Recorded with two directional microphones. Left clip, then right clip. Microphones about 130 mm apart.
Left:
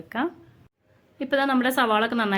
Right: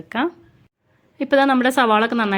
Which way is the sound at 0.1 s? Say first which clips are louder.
Right 5 dB; 30° right (ahead or behind).